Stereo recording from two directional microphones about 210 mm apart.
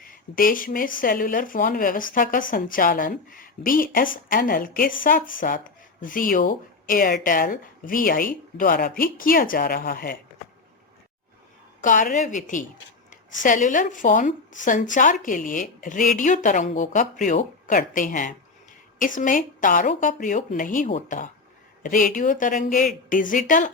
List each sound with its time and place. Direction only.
0.0 s speech: 40° left (ahead or behind)
11.8 s speech: 40° left (ahead or behind)
13.4 s speech: 40° left (ahead or behind)